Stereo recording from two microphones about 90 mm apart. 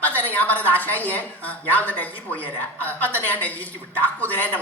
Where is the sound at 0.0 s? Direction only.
20° left (ahead or behind).